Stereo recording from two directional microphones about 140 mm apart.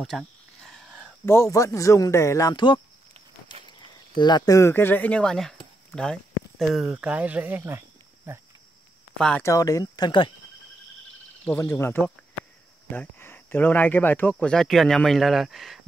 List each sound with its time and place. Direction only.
0.0 s a sound: 5° left (ahead or behind)
1.2 s speech: 20° left (ahead or behind)
4.1 s speech: 30° left (ahead or behind); by 5.6 s 5° left (ahead or behind)
5.9 s a sound: 5° left (ahead or behind)
6.6 s speech: centre (ahead or behind)
9.4 s speech: 25° left (ahead or behind)
11.5 s speech: 15° left (ahead or behind); by 15.8 s centre (ahead or behind)